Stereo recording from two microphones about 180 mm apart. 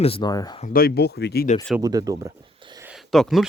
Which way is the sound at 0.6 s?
55° left (ahead or behind).